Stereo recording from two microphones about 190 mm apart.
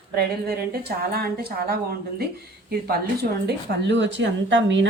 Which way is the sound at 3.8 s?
70° right (ahead or behind).